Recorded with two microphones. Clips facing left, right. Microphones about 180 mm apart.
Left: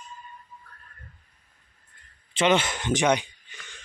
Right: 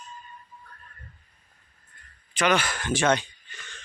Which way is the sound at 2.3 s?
25° left (ahead or behind).